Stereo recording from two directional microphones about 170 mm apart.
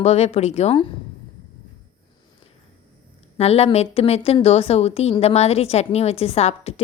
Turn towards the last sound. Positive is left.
turn(degrees=35)  # may be behind; listen again after turning